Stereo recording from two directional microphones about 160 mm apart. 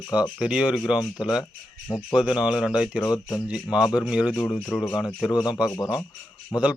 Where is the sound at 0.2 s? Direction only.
5° right (ahead or behind).